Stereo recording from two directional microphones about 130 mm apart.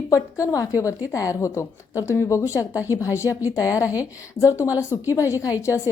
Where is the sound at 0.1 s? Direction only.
25° left (ahead or behind).